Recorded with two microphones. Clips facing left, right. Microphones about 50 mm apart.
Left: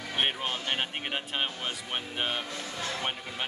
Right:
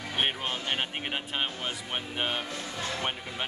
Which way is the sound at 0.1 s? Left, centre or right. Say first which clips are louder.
Even; centre.